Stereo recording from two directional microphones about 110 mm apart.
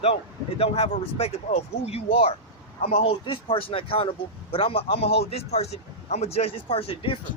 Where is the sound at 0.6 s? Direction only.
70° left (ahead or behind).